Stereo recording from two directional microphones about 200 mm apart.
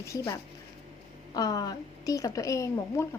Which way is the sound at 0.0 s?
15° left (ahead or behind).